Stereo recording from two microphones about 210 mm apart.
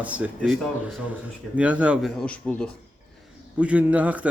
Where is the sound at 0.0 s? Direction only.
5° right (ahead or behind).